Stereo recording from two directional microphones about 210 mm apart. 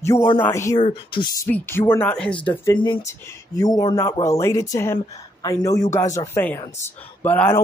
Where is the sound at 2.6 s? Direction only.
20° left (ahead or behind).